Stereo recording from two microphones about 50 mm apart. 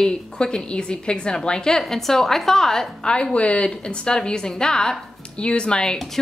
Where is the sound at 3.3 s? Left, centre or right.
Left.